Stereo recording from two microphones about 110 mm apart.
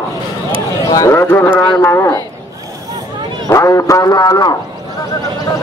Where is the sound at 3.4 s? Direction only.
30° left (ahead or behind).